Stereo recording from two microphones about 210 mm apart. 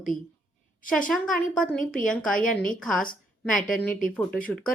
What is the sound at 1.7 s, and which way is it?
Speech, 40° left (ahead or behind).